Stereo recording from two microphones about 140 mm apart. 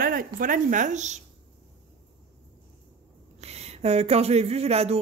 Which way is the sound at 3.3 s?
50° right (ahead or behind).